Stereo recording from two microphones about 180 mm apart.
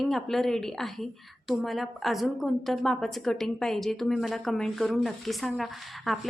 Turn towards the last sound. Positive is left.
turn(degrees=0)  # may be behind; listen again after turning